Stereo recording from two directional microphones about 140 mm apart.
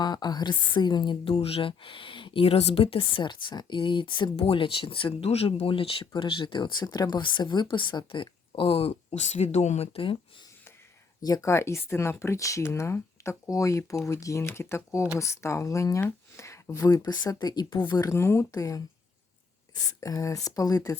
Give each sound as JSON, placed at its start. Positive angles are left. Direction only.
{"t": 0.0, "sound": "speech", "side_deg": 30}
{"t": 11.2, "sound": "speech", "side_deg": 25}